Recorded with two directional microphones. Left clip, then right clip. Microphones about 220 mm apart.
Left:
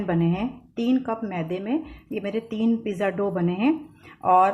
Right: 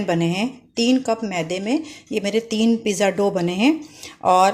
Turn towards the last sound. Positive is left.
turn(degrees=-45)  # may be behind; listen again after turning